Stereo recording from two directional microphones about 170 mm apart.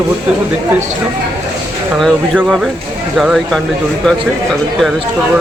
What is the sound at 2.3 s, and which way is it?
Speech, 5° right (ahead or behind).